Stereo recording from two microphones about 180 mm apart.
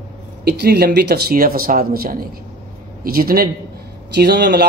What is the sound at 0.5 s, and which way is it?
A man's voice, 60° right (ahead or behind).